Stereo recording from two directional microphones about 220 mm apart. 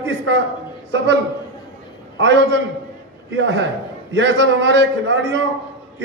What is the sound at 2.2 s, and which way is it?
A man's voice, 55° right (ahead or behind).